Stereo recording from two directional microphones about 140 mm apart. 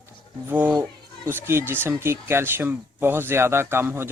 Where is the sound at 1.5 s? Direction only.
15° right (ahead or behind).